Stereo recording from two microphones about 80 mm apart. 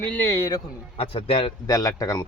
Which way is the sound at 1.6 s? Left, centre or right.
Left.